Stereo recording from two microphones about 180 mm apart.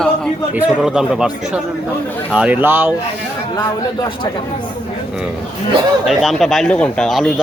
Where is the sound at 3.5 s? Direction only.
25° left (ahead or behind).